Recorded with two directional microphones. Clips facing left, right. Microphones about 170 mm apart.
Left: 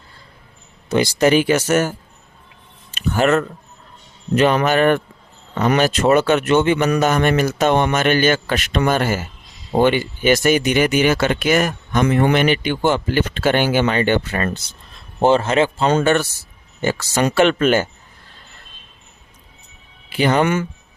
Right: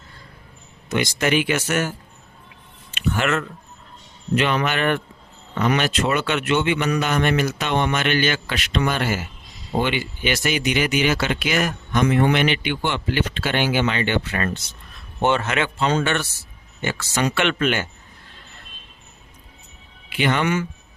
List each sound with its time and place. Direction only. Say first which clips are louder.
0.9 s speech: left 6 dB; 35° left (ahead or behind)
2.9 s a sound: left 6 dB; 40° left (ahead or behind)
4.4 s speech: left 6 dB; 40° left (ahead or behind)
15.9 s speech: left 6 dB; 45° left (ahead or behind)
20.1 s speech: left 5 dB; 40° left (ahead or behind)